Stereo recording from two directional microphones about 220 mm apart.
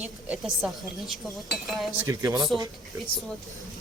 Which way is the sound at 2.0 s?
15° right (ahead or behind).